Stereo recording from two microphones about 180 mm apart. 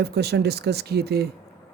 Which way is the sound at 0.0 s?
65° right (ahead or behind).